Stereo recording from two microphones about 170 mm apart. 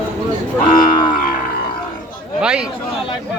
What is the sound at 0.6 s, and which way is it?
Livestock, 55° left (ahead or behind).